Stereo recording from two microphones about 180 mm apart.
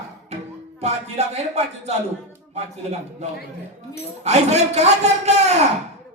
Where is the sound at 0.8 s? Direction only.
40° right (ahead or behind).